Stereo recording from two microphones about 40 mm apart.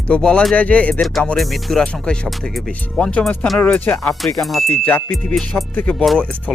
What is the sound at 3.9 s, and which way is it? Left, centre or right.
Speech, left.